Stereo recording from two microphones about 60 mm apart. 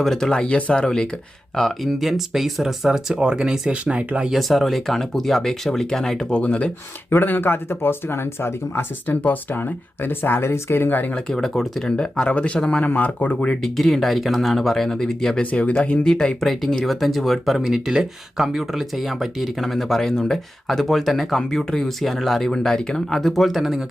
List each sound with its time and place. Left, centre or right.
0.0 s speech: centre
1.5 s speech: centre
4.3 s speech: centre
7.1 s speech: left
11.3 s speech: centre
13.6 s speech: centre
15.5 s speech: left
16.0 s speech: centre